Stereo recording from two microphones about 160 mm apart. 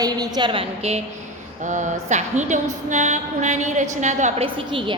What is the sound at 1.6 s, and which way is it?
A woman's voice, 50° right (ahead or behind).